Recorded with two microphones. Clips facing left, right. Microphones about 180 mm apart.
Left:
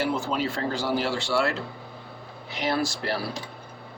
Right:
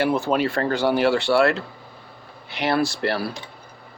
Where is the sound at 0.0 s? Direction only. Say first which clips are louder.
Right 6 dB; 65° right (ahead or behind).